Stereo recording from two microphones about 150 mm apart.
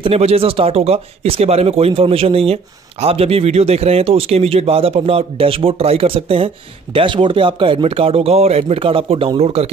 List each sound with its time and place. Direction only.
0.0 s speech: 40° right (ahead or behind)